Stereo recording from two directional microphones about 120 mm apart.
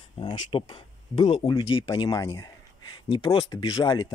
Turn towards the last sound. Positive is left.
turn(degrees=40)  # may be behind; listen again after turning